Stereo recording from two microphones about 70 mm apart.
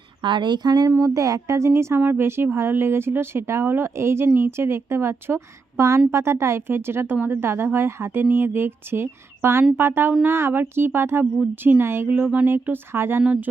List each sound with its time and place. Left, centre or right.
0.3 s speech: right
0.9 s speech: right
13.2 s speech: right